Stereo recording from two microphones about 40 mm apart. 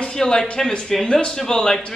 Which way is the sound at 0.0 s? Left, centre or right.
Centre.